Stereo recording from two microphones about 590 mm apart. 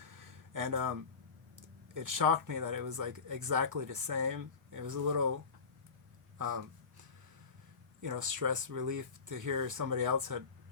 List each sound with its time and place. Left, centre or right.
0.0 s a sound: right
1.9 s speech: right
6.4 s speech: right
8.0 s speech: right